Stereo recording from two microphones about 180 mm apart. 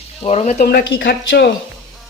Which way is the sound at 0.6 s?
60° left (ahead or behind).